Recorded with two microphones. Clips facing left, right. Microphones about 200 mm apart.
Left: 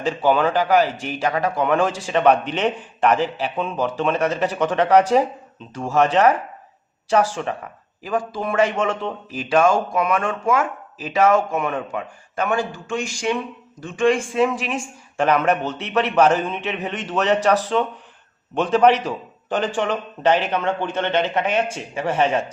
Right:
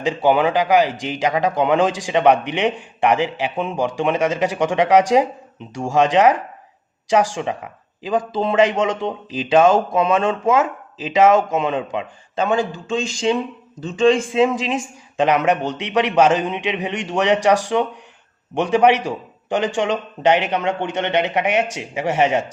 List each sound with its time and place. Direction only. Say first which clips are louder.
0.0 s a man's voice: right 2 dB; 15° right (ahead or behind)